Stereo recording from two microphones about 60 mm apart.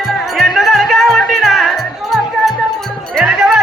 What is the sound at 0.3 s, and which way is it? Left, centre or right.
Music, centre.